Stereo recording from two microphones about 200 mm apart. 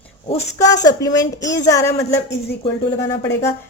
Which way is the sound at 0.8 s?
20° left (ahead or behind).